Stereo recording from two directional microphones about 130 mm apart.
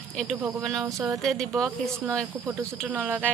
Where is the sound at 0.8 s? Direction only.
20° right (ahead or behind).